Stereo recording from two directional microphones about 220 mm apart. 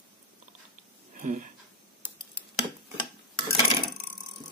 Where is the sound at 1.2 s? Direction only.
35° right (ahead or behind).